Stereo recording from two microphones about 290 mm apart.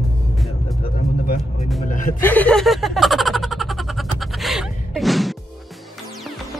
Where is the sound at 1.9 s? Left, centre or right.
Left.